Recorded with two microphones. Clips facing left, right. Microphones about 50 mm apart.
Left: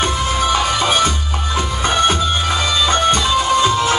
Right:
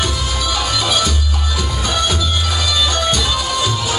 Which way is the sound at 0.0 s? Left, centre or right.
Left.